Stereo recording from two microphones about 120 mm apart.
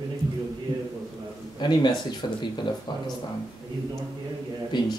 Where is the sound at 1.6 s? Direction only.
35° left (ahead or behind).